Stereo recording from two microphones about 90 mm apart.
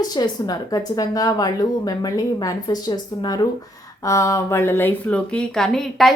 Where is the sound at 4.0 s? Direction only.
35° left (ahead or behind).